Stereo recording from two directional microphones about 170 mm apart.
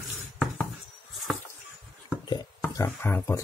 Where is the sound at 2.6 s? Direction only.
15° left (ahead or behind).